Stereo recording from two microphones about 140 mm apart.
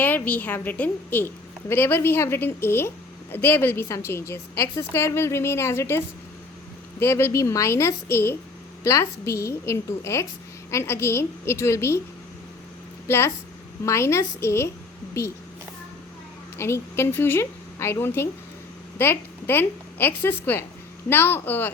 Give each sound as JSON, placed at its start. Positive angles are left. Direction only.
{"t": 0.0, "sound": "a woman's voice", "side_deg": 15}
{"t": 7.0, "sound": "a woman's voice", "side_deg": 15}
{"t": 13.1, "sound": "a woman's voice", "side_deg": 20}
{"t": 16.6, "sound": "a woman's voice", "side_deg": 20}